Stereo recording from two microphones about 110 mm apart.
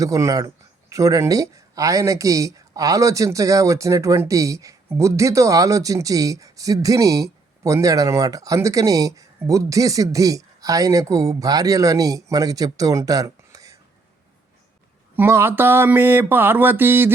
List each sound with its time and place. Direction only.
0.0 s speech: 30° right (ahead or behind)
15.1 s speech: 20° right (ahead or behind)